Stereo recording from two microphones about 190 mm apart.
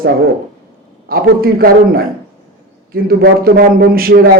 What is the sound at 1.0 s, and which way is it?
A man's voice, 50° right (ahead or behind).